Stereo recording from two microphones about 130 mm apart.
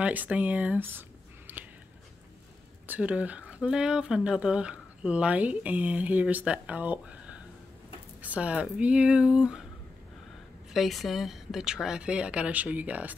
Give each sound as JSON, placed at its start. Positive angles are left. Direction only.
{"t": 0.0, "sound": "speech", "side_deg": -10}
{"t": 1.5, "sound": "a sound", "side_deg": -15}
{"t": 2.9, "sound": "speech", "side_deg": -10}
{"t": 10.7, "sound": "speech", "side_deg": 0}